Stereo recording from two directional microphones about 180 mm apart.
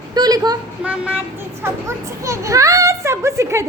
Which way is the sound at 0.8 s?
5° right (ahead or behind).